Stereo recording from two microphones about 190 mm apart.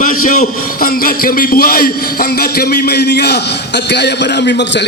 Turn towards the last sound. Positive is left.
turn(degrees=65)  # may be behind; listen again after turning